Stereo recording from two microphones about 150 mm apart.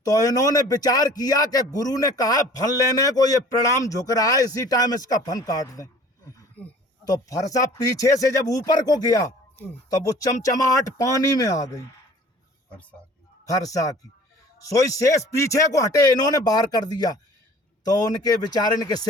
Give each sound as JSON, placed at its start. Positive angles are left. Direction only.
{"t": 0.0, "sound": "a man's voice", "side_deg": 25}
{"t": 7.5, "sound": "a man's voice", "side_deg": 25}
{"t": 13.4, "sound": "a man's voice", "side_deg": 25}